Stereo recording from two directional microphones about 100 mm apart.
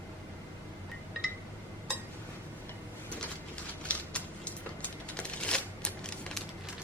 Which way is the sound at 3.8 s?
10° left (ahead or behind).